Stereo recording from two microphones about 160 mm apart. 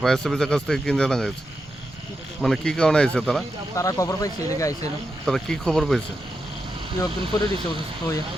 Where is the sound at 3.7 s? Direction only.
20° left (ahead or behind).